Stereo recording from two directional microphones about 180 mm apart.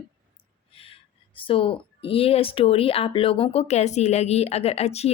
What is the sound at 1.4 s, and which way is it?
Speech, 30° left (ahead or behind).